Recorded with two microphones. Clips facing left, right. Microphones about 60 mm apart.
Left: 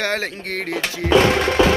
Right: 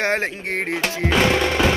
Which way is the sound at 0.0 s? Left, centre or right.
Right.